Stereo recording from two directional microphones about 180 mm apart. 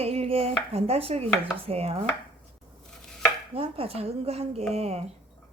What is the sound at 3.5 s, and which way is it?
Speech, 30° right (ahead or behind).